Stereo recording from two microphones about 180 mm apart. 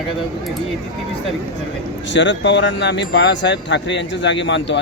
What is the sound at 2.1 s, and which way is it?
Speech, 90° left.